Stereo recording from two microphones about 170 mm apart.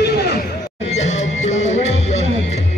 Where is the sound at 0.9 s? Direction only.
40° left (ahead or behind).